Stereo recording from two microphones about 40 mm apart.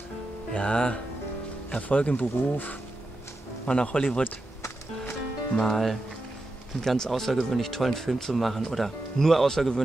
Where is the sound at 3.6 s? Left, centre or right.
Left.